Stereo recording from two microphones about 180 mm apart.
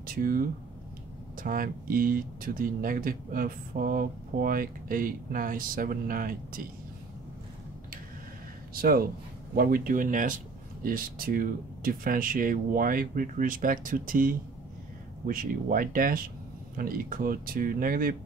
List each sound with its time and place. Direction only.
0.0 s speech: 50° right (ahead or behind)
9.6 s speech: 50° right (ahead or behind)